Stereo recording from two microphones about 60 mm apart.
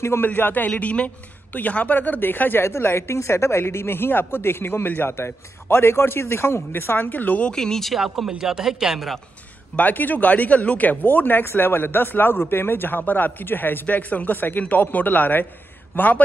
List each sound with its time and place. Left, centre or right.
0.0 s a man's voice: left
0.3 s a woman's voice: left
0.7 s a woman's voice: left
7.5 s speech: centre
8.0 s speech: centre
9.8 s a woman's voice: left